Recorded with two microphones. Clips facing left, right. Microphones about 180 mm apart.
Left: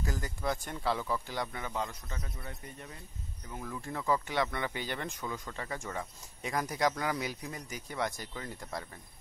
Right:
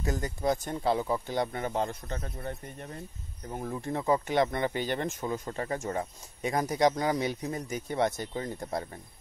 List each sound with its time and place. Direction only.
0.0 s speech: 25° right (ahead or behind)
1.5 s speech: 45° right (ahead or behind)
2.2 s speech: 45° right (ahead or behind)
3.8 s speech: 25° right (ahead or behind)
4.3 s speech: 45° right (ahead or behind)
6.4 s speech: 25° right (ahead or behind)